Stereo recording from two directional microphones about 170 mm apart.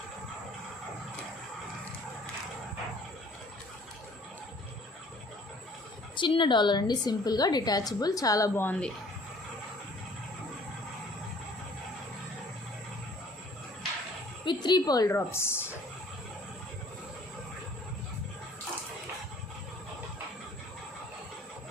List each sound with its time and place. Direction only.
6.1 s a woman's voice: 30° left (ahead or behind); by 8.9 s 10° left (ahead or behind)
14.4 s a woman's voice: 25° left (ahead or behind)